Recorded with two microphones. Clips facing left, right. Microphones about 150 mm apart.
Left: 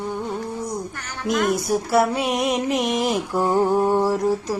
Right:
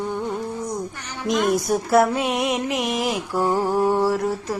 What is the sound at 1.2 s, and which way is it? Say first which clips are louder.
Speech: right 1 dB; centre (ahead or behind).